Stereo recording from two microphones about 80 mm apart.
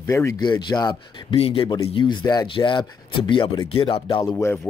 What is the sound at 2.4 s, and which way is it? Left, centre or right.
Speech, left.